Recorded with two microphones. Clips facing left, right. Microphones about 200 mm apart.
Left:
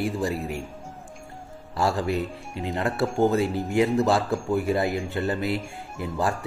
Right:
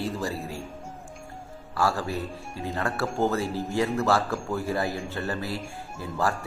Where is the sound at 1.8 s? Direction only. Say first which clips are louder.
Left 3 dB; 20° left (ahead or behind).